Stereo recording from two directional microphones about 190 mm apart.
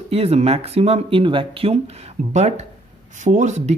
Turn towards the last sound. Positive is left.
turn(degrees=-40)  # may be behind; listen again after turning